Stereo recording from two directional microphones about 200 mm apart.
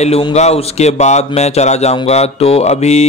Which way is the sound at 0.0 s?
30° left (ahead or behind).